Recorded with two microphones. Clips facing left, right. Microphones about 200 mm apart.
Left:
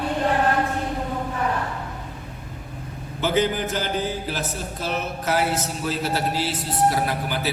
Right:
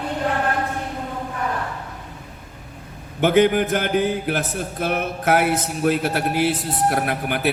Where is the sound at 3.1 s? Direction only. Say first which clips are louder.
Right 6 dB; 60° right (ahead or behind).